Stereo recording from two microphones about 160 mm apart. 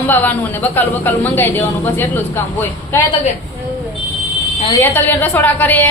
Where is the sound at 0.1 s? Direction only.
10° left (ahead or behind).